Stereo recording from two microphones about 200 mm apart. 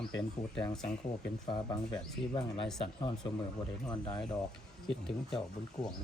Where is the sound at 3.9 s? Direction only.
20° left (ahead or behind).